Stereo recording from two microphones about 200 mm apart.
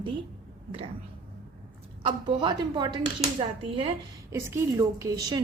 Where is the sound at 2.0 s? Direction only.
25° right (ahead or behind).